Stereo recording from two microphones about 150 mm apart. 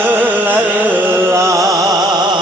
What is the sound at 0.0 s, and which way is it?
Music, 10° right (ahead or behind).